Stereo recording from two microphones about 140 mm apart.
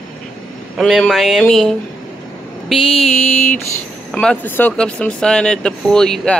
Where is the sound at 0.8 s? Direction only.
Centre (ahead or behind).